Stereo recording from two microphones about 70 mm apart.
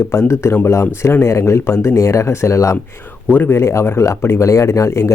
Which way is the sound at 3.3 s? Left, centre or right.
Left.